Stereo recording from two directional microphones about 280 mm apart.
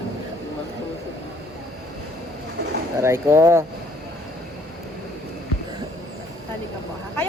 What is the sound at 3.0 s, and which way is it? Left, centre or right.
Speech, centre.